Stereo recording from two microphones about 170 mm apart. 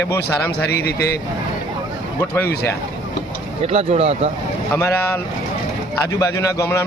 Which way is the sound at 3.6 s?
35° right (ahead or behind).